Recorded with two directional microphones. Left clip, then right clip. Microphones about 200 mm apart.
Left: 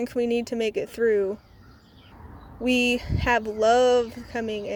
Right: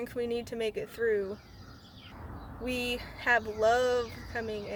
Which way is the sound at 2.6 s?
35° left (ahead or behind).